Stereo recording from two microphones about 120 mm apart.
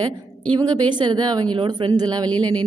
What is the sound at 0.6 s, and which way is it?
A woman's voice, 35° right (ahead or behind).